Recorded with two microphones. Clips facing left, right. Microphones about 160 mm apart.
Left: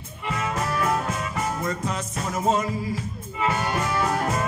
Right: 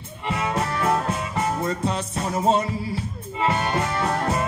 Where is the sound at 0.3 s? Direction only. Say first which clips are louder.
Right 2 dB; 30° right (ahead or behind).